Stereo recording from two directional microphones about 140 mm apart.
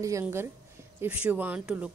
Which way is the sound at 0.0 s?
20° right (ahead or behind).